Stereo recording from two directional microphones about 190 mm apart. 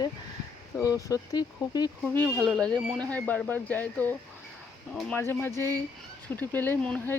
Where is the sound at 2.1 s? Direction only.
20° right (ahead or behind).